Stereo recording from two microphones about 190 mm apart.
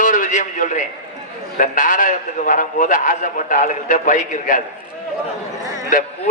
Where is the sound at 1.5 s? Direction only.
45° left (ahead or behind).